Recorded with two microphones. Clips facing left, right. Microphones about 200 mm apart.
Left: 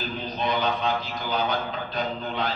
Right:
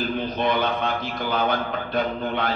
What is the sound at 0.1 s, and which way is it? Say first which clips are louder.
A man's voice: right 4 dB; 55° right (ahead or behind).